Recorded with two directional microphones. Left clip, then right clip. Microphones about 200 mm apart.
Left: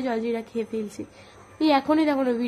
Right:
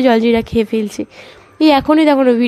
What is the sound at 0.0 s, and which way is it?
A woman's voice, 45° right (ahead or behind).